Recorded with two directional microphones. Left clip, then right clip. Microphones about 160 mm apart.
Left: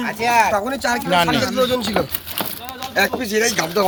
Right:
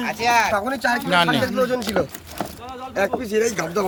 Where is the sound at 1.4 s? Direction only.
45° left (ahead or behind).